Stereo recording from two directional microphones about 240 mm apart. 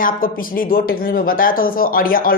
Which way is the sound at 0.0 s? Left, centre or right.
Left.